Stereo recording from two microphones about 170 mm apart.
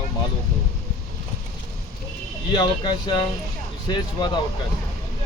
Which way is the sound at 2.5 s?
25° left (ahead or behind).